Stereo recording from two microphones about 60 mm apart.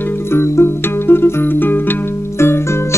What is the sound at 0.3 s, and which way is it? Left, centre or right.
Music, left.